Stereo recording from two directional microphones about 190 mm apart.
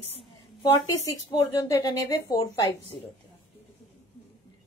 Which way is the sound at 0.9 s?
20° left (ahead or behind).